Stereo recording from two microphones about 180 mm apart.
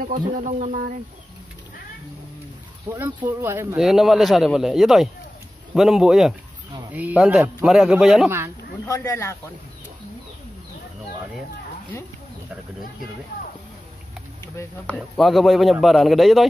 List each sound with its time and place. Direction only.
0.0 s speech: 45° right (ahead or behind)
3.3 s speech: 15° right (ahead or behind)
3.8 s speech: centre (ahead or behind)
8.8 s speech: 15° left (ahead or behind)
15.0 s speech: centre (ahead or behind)